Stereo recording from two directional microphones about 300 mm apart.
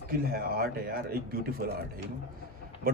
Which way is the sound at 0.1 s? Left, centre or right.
Right.